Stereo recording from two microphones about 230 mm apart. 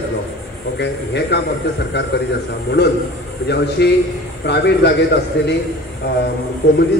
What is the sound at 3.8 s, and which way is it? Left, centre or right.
Speech, left.